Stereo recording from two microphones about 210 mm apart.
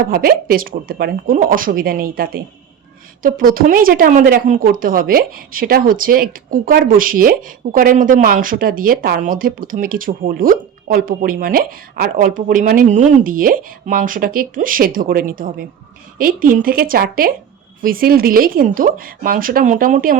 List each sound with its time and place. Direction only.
0.0 s speech: 45° right (ahead or behind)